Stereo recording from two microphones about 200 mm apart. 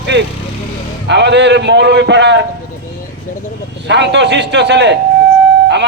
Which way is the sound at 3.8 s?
60° right (ahead or behind).